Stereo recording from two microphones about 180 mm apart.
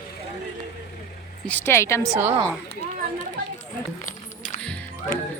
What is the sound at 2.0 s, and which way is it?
Speech, 15° right (ahead or behind).